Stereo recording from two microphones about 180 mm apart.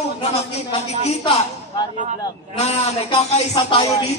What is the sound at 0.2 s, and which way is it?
Speech, 35° left (ahead or behind).